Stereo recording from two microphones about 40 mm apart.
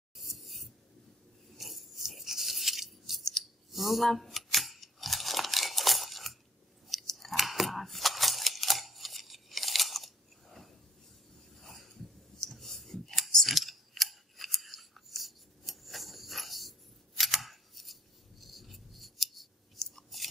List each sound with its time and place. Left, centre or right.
0.1 s writing: centre
1.6 s a sound: centre
3.7 s speech: centre
4.1 s crumpling: centre
7.2 s a sound: centre
12.4 s whispering: centre
13.3 s scissors: centre
17.2 s camera: centre
18.4 s scissors: centre
19.8 s chewing: centre